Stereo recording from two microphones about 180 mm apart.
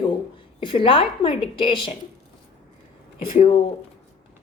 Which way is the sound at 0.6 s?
30° left (ahead or behind).